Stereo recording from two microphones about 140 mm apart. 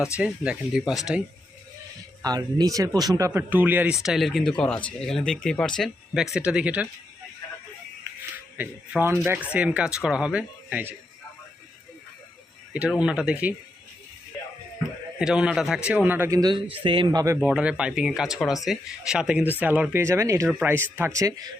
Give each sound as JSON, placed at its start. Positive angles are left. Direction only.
{"t": 0.0, "sound": "speech", "side_deg": -5}
{"t": 2.2, "sound": "speech", "side_deg": -30}
{"t": 6.3, "sound": "speech", "side_deg": -5}
{"t": 8.5, "sound": "speech", "side_deg": -15}
{"t": 12.7, "sound": "speech", "side_deg": -10}
{"t": 15.2, "sound": "speech", "side_deg": -5}
{"t": 16.4, "sound": "speech", "side_deg": -30}
{"t": 17.4, "sound": "speech", "side_deg": -10}